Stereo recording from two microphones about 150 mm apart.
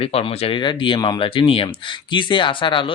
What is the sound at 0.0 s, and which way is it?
Speech, 40° left (ahead or behind).